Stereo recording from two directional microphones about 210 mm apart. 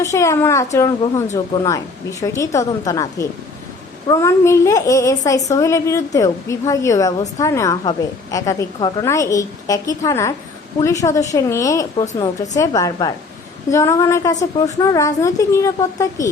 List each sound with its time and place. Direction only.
0.0 s a woman's voice: 15° left (ahead or behind)